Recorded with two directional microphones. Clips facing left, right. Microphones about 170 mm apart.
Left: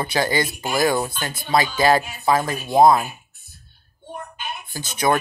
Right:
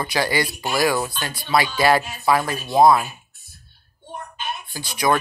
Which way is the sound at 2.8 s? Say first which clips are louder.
Even; 40° left (ahead or behind).